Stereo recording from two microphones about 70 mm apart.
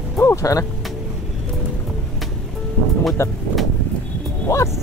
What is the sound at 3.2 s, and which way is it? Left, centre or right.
Speech, left.